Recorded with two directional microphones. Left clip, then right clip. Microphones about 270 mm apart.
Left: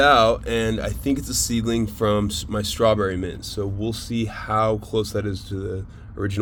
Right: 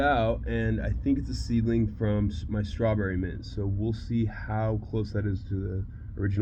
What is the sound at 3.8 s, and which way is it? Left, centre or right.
Speech, left.